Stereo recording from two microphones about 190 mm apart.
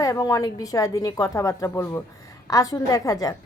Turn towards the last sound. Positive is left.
turn(degrees=20)  # may be behind; listen again after turning